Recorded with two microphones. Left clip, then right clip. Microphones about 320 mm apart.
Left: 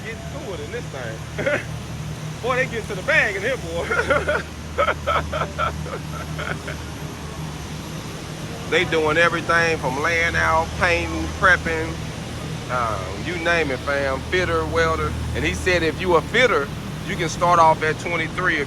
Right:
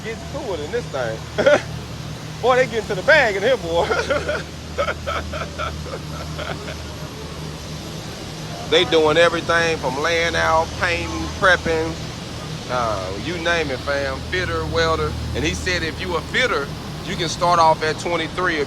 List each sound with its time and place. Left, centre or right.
1.4 s speech: centre
3.1 s speech: centre
3.9 s speech: centre
8.7 s speech: centre